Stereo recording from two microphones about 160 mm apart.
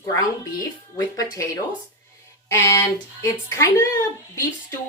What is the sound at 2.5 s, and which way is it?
Speech, 20° left (ahead or behind).